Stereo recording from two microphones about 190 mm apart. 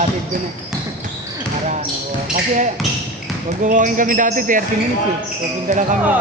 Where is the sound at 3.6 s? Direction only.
40° right (ahead or behind).